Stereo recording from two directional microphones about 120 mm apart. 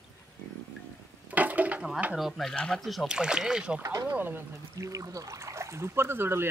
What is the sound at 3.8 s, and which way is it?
Speech, 25° right (ahead or behind).